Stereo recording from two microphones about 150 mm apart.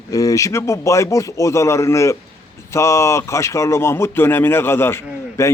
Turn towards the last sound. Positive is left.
turn(degrees=15)  # may be behind; listen again after turning